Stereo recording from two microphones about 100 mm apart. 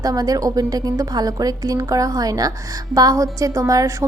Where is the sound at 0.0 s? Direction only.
40° right (ahead or behind).